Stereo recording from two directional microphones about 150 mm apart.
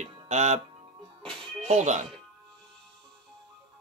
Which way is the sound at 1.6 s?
50° right (ahead or behind).